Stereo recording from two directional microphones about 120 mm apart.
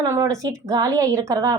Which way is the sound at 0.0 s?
25° right (ahead or behind).